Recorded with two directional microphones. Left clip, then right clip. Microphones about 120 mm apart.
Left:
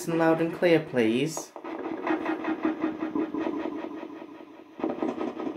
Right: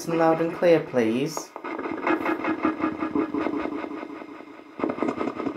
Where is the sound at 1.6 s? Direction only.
20° right (ahead or behind).